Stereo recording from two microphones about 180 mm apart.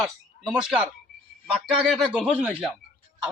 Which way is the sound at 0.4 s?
45° left (ahead or behind).